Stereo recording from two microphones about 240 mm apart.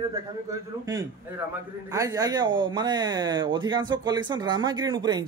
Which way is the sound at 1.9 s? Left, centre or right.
Centre.